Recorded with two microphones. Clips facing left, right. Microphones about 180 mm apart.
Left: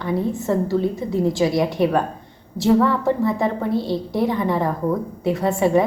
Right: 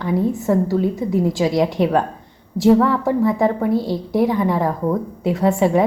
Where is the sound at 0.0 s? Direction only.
15° right (ahead or behind).